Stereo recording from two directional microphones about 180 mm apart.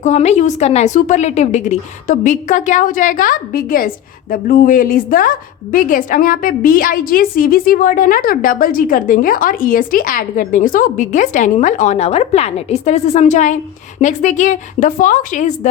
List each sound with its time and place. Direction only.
0.0 s a woman's voice: 40° left (ahead or behind)